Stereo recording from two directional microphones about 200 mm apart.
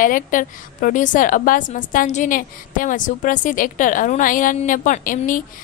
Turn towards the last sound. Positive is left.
turn(degrees=40)  # may be behind; listen again after turning